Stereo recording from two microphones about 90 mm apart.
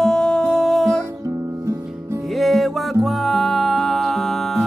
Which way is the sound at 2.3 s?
Centre (ahead or behind).